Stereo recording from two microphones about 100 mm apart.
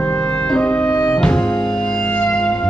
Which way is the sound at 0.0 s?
10° left (ahead or behind).